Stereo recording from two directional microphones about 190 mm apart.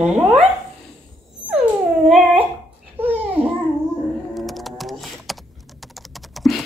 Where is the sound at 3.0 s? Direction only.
10° right (ahead or behind).